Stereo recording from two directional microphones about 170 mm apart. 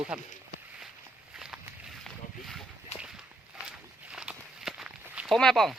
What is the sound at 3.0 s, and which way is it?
Walk, 5° right (ahead or behind).